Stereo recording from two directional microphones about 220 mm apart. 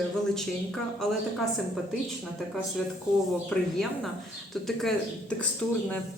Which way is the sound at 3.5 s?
5° left (ahead or behind).